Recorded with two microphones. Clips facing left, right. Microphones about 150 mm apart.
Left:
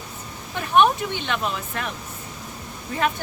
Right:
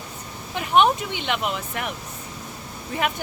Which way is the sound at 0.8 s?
15° right (ahead or behind).